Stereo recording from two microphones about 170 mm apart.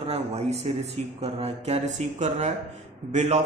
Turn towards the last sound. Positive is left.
turn(degrees=-40)  # may be behind; listen again after turning